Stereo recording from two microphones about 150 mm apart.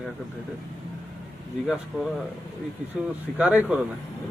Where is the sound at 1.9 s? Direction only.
Centre (ahead or behind).